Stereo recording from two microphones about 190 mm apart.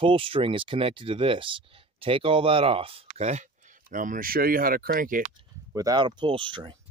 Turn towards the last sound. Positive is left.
turn(degrees=-25)  # may be behind; listen again after turning